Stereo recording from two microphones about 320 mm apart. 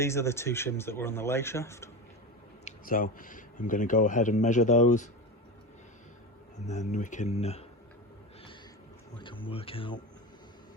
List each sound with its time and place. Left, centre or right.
0.0 s speech: centre
2.6 s speech: left
6.7 s speech: left
9.2 s speech: centre